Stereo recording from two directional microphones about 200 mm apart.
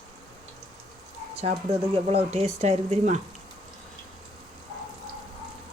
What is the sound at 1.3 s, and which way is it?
Dog, 30° right (ahead or behind).